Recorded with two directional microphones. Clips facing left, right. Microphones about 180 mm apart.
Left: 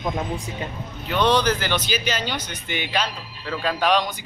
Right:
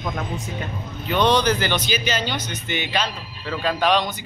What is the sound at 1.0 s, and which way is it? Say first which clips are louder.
Speech: right 1 dB; 5° left (ahead or behind).